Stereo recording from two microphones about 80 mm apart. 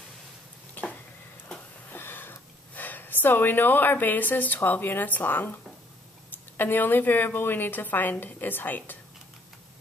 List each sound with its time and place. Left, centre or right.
2.0 s a woman's voice: left
6.5 s a woman's voice: left